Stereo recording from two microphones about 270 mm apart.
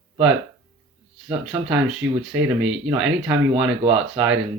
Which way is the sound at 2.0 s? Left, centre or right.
Right.